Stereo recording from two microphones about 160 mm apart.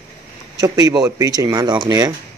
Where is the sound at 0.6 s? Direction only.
25° right (ahead or behind).